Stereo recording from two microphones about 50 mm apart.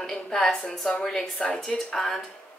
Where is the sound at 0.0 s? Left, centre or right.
Centre.